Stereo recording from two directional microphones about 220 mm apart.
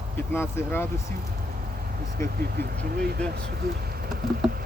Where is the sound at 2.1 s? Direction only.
45° right (ahead or behind).